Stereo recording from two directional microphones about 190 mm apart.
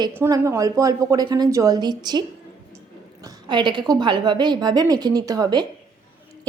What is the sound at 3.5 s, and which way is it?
A woman's voice, 25° right (ahead or behind).